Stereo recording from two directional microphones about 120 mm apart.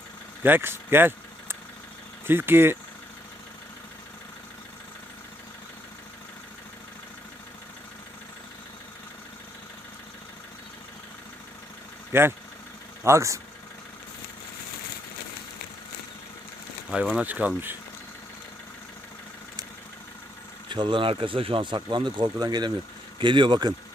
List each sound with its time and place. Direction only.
0.4 s speech: 15° right (ahead or behind)
12.1 s speech: 20° right (ahead or behind)
16.9 s speech: 10° right (ahead or behind)
20.7 s speech: 40° right (ahead or behind)